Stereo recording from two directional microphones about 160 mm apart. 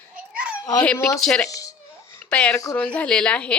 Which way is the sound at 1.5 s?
20° left (ahead or behind).